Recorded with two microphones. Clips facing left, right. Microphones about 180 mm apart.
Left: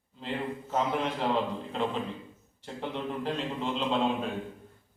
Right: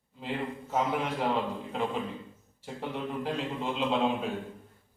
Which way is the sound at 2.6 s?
5° right (ahead or behind).